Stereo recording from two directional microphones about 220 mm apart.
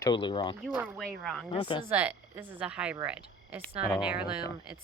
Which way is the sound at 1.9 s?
10° right (ahead or behind).